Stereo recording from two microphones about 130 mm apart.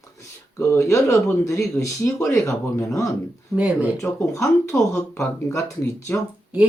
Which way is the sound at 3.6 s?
10° right (ahead or behind).